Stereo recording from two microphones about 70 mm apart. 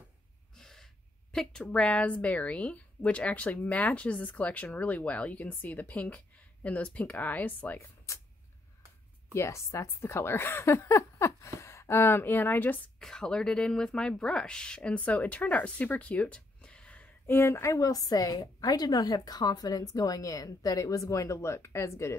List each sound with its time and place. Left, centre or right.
0.6 s gasp: centre
1.3 s a woman's voice: centre; by 7.9 s left
9.3 s a woman's voice: left
13.0 s a woman's voice: centre
17.4 s a woman's voice: left